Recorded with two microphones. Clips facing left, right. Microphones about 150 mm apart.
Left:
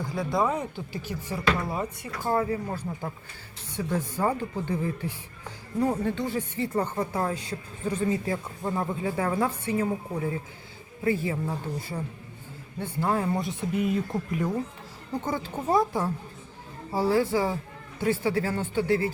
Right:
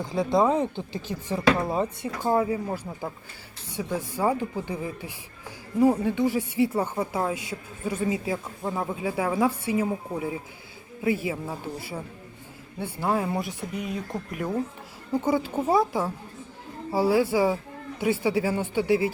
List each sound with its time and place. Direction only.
0.0 s speech: 25° right (ahead or behind)
2.2 s speech: 15° right (ahead or behind)